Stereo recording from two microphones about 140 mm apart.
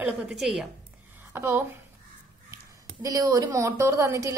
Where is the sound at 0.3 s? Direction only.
5° right (ahead or behind).